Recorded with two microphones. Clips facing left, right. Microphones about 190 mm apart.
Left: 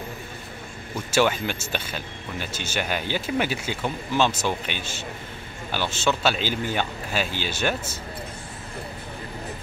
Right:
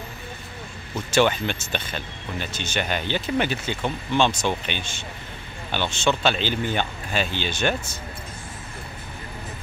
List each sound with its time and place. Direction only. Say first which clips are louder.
1.1 s speech: right 1 dB; 5° left (ahead or behind)